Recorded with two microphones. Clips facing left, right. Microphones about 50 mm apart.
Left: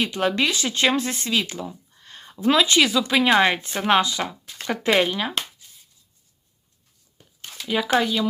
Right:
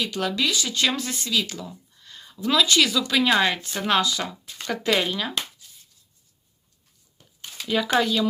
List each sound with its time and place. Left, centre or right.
0.1 s speech: left
7.7 s speech: centre